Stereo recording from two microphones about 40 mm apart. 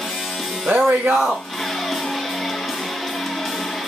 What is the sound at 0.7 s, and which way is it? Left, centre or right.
Speech, right.